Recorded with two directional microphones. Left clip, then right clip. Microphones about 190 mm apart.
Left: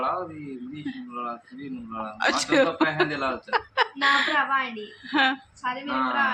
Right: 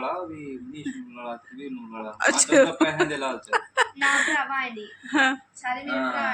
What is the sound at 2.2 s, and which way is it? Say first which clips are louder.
A man's voice: right 3 dB; 10° right (ahead or behind).